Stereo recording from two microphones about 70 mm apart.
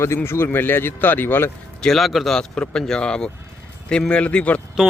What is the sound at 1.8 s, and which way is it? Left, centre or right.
Speech, centre.